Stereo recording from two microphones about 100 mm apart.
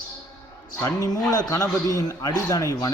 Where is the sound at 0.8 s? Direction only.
35° left (ahead or behind).